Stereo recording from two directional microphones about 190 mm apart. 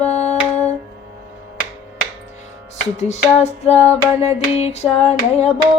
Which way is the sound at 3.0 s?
35° left (ahead or behind).